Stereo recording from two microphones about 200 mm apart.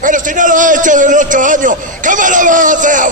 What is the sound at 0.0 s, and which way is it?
A man's voice, 40° right (ahead or behind).